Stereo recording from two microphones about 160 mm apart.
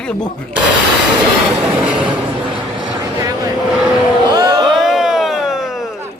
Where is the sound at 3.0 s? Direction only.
20° right (ahead or behind).